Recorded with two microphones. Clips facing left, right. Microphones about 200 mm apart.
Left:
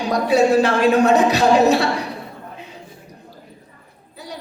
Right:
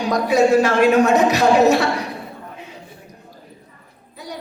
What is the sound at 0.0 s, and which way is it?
A man's voice, 30° left (ahead or behind).